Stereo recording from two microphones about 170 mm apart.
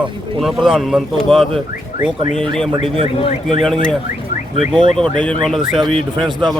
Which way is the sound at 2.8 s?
30° right (ahead or behind).